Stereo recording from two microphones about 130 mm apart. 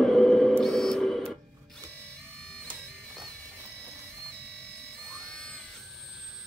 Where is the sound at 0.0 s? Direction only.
5° left (ahead or behind).